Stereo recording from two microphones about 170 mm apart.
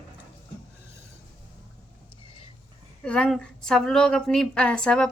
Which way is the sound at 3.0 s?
5° left (ahead or behind).